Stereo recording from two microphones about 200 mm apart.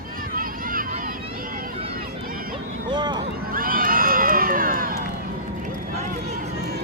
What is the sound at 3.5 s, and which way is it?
Run, 45° right (ahead or behind).